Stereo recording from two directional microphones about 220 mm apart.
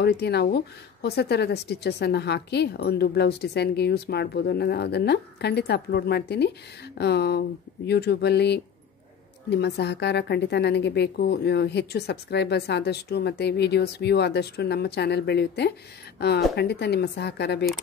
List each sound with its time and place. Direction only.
0.0 s speech: 50° left (ahead or behind)